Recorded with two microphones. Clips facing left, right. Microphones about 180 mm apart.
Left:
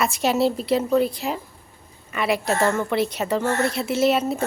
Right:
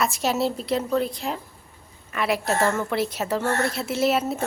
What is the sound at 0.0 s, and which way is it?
A woman's voice, centre (ahead or behind).